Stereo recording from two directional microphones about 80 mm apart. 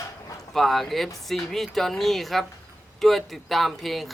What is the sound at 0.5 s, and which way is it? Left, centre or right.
Speech, centre.